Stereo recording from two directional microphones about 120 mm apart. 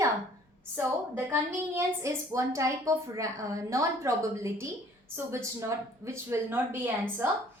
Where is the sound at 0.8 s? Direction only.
20° right (ahead or behind).